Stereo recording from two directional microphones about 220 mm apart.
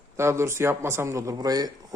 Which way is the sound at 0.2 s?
10° right (ahead or behind).